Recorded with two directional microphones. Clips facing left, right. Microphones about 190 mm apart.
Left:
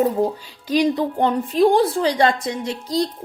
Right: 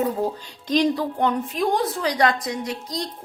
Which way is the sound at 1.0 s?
30° left (ahead or behind).